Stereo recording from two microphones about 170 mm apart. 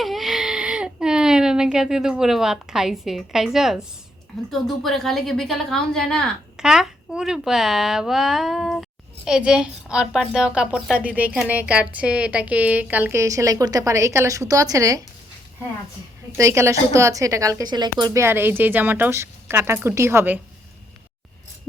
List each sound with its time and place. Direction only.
0.0 s a sound: centre (ahead or behind)
4.6 s a woman's voice: centre (ahead or behind); by 15.0 s 20° right (ahead or behind)
16.4 s speech: 15° right (ahead or behind)